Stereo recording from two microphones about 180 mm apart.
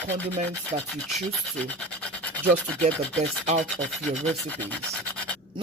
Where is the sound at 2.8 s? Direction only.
40° right (ahead or behind).